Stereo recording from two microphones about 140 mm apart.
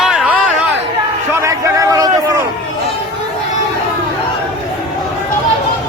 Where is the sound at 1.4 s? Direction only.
25° right (ahead or behind).